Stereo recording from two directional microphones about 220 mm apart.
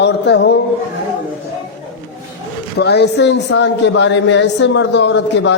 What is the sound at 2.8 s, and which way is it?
A man's voice, 50° left (ahead or behind).